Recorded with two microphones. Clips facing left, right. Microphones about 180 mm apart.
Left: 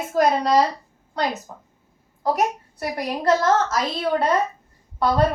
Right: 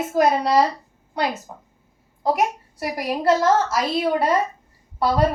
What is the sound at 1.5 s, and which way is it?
Speech, 20° right (ahead or behind).